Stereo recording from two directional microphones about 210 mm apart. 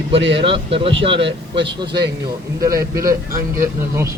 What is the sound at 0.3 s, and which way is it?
Speech, 25° right (ahead or behind).